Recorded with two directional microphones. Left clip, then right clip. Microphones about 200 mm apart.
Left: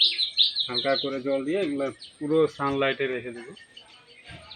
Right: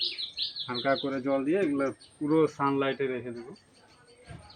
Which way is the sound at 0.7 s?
10° right (ahead or behind).